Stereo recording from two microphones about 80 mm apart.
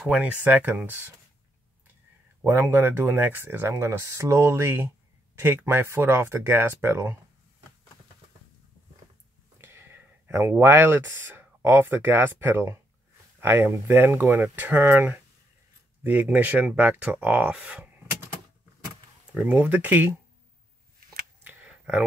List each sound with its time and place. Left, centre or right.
0.0 s speech: centre
2.7 s speech: right
9.6 s a sound: right
10.5 s speech: right
19.3 s speech: centre
21.5 s a sound: centre